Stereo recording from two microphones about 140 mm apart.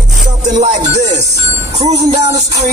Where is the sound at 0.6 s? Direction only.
55° right (ahead or behind).